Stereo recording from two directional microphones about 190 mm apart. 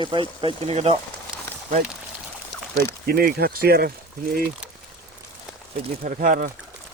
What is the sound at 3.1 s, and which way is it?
Speech, 55° right (ahead or behind).